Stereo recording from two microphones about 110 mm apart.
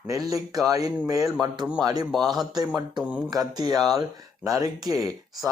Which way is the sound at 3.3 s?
35° right (ahead or behind).